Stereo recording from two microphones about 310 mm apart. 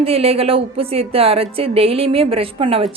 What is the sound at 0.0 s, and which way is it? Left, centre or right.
Speech, centre.